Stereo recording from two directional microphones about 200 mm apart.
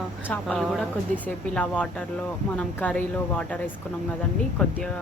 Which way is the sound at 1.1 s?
35° right (ahead or behind).